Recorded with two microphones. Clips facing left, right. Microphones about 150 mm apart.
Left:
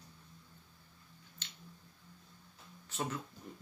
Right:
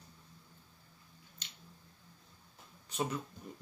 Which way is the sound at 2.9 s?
15° right (ahead or behind).